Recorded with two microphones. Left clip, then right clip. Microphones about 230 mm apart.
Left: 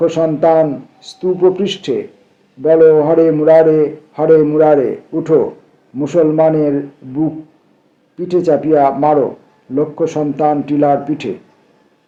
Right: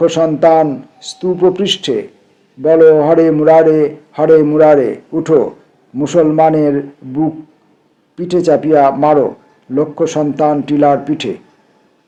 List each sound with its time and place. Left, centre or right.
0.0 s speech: right